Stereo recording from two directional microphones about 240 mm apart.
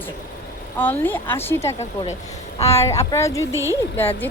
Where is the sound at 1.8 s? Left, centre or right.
Left.